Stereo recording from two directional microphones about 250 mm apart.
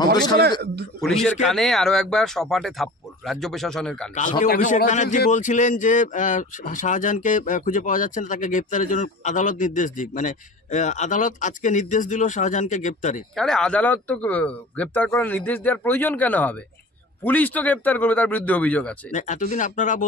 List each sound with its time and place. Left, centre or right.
0.4 s speech: right
1.0 s speech: centre
4.4 s a man's voice: left
13.4 s speech: centre
19.1 s a man's voice: left